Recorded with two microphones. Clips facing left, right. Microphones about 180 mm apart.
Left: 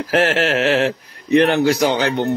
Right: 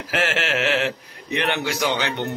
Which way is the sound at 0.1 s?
40° left (ahead or behind).